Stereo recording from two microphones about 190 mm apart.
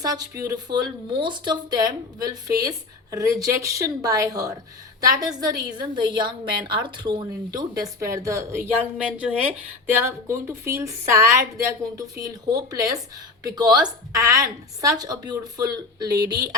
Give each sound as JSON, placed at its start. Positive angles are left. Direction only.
{"t": 0.0, "sound": "a woman's voice", "side_deg": -20}